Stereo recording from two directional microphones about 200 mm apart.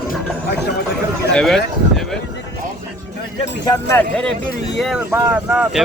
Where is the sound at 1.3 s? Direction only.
5° left (ahead or behind).